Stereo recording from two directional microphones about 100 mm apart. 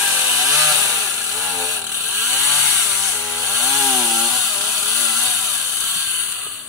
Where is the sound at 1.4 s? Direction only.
Centre (ahead or behind).